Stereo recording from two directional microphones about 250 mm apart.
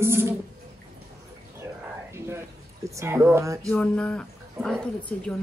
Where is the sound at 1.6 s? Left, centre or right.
Centre.